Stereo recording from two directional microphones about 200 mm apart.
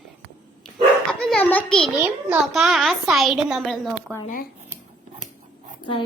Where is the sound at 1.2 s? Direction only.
5° left (ahead or behind).